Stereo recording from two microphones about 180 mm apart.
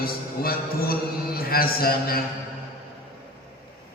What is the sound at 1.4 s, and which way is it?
Speech, 55° left (ahead or behind).